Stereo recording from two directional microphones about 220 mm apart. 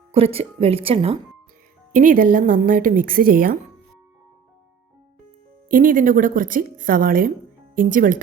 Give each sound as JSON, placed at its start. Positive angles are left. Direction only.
{"t": 0.1, "sound": "speech", "side_deg": -25}
{"t": 1.9, "sound": "speech", "side_deg": -35}
{"t": 5.6, "sound": "speech", "side_deg": -40}